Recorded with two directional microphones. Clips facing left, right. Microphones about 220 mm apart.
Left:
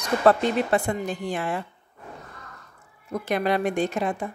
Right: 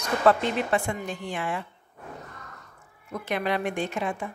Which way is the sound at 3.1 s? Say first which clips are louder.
Left 4 dB; 40° left (ahead or behind).